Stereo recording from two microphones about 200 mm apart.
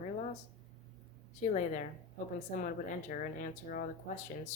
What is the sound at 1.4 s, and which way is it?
Speech, 35° left (ahead or behind).